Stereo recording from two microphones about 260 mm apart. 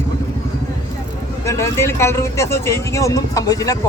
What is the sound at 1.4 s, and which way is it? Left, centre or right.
A man's voice, centre.